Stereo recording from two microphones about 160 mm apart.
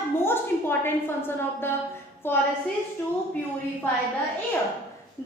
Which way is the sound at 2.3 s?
15° left (ahead or behind).